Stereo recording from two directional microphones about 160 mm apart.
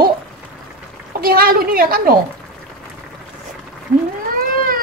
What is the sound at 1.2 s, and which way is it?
A woman's voice, 65° right (ahead or behind).